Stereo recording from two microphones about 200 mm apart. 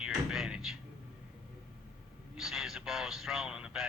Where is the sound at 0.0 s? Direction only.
5° right (ahead or behind).